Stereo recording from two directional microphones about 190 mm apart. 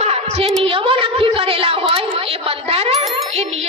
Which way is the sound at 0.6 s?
30° right (ahead or behind).